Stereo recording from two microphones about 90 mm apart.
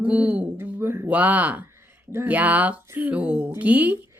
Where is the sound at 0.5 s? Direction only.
25° right (ahead or behind).